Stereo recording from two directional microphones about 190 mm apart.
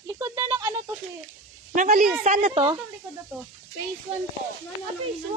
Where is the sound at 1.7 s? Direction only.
50° right (ahead or behind).